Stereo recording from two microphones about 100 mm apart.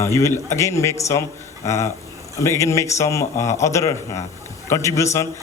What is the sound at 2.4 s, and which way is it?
Speech, 30° left (ahead or behind).